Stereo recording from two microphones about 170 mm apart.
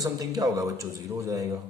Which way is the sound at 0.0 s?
20° right (ahead or behind).